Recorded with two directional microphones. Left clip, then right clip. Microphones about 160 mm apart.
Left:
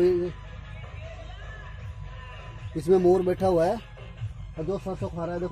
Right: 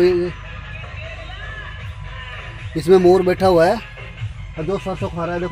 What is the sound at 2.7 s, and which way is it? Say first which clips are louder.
Speech: right 8 dB; 15° right (ahead or behind).